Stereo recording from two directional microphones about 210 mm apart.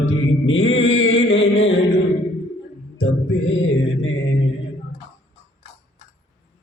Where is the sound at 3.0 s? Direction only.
65° left (ahead or behind).